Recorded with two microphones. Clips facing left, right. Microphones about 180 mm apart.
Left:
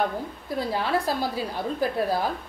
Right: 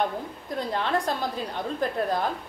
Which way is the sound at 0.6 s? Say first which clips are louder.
Left 1 dB; 5° left (ahead or behind).